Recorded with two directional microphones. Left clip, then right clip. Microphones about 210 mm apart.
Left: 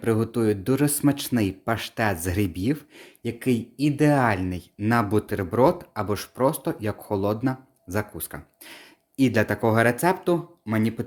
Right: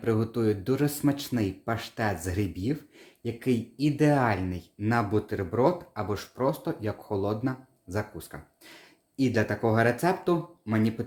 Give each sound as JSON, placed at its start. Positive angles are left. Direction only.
{"t": 0.0, "sound": "speech", "side_deg": 40}